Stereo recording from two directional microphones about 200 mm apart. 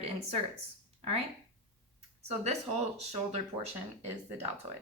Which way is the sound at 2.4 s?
30° right (ahead or behind).